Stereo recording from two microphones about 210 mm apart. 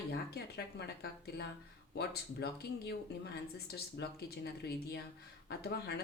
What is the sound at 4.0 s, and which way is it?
Speech, 55° left (ahead or behind).